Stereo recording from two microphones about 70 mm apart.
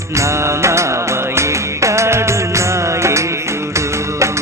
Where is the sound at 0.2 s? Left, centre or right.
Right.